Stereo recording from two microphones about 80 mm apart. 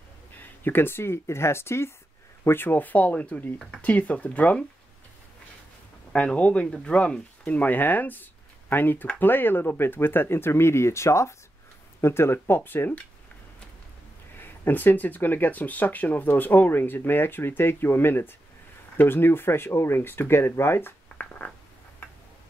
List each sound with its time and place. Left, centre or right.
0.4 s speech: left
6.1 s speech: centre
14.4 s speech: left